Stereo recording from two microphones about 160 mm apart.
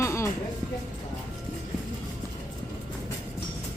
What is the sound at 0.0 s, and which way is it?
Music, 20° left (ahead or behind).